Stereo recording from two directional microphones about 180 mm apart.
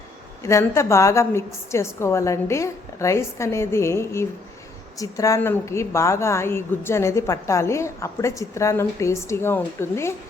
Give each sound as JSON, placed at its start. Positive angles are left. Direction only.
{"t": 0.4, "sound": "a woman's voice", "side_deg": 15}